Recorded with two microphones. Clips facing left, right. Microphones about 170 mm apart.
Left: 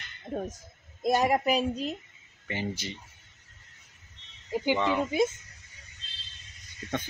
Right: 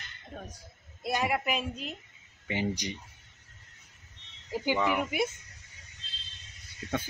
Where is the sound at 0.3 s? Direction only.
45° left (ahead or behind).